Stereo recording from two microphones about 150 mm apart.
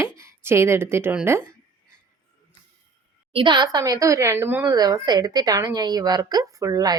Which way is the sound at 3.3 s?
35° right (ahead or behind).